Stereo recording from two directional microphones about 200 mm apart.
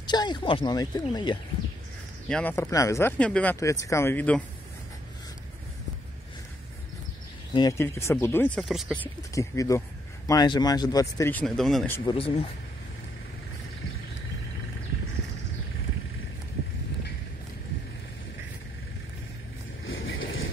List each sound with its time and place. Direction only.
0.0 s speech: 20° left (ahead or behind)
2.2 s speech: 5° left (ahead or behind)
7.5 s speech: 15° left (ahead or behind)
8.6 s speech: centre (ahead or behind)
12.1 s speech: 30° left (ahead or behind)
19.8 s vehicle: 80° left